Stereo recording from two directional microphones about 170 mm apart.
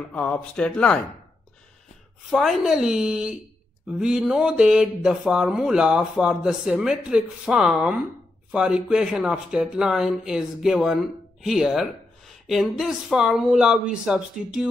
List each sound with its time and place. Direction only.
0.1 s speech: 10° left (ahead or behind)
2.3 s speech: centre (ahead or behind)